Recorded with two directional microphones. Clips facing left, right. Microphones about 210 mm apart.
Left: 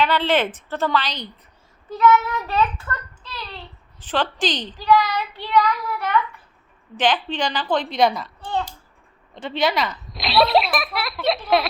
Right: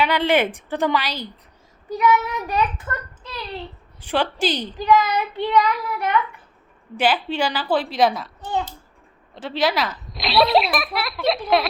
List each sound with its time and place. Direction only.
0.0 s a child's voice: 10° right (ahead or behind)